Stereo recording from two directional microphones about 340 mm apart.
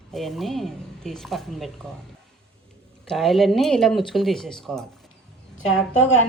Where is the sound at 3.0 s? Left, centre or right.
Centre.